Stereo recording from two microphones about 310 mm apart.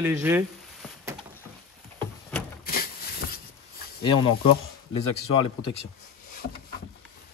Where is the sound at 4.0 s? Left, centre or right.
Centre.